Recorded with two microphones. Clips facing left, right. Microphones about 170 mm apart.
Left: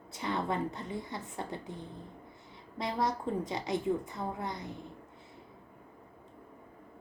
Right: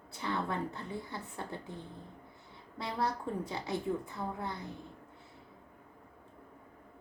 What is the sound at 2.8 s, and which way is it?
A woman's voice, 15° left (ahead or behind).